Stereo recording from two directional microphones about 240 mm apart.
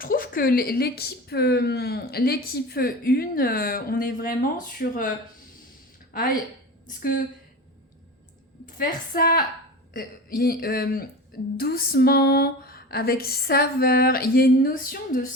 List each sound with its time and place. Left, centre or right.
0.0 s speech: left
8.8 s speech: left